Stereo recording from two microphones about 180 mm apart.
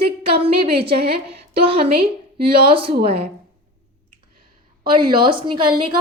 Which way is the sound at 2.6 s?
30° right (ahead or behind).